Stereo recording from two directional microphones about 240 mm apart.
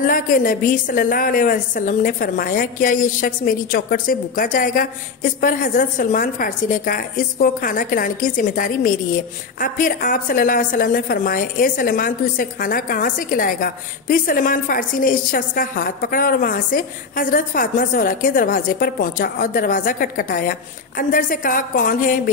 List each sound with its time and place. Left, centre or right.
0.0 s a woman's voice: left